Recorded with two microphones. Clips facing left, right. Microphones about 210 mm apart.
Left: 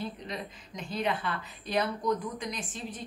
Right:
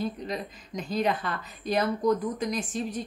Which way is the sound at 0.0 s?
40° right (ahead or behind).